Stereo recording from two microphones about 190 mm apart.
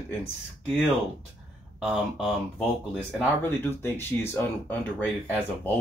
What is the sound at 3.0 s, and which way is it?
Speech, 10° left (ahead or behind).